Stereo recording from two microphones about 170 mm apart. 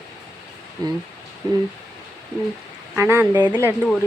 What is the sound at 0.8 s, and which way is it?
Speech, 25° right (ahead or behind).